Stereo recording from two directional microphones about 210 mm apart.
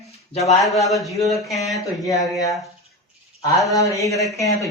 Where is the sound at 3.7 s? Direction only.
15° left (ahead or behind).